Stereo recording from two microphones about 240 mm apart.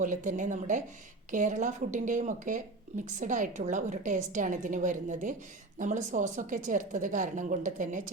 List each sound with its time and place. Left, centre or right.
0.0 s speech: right